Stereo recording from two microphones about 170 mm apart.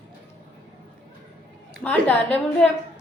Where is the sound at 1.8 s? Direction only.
10° left (ahead or behind).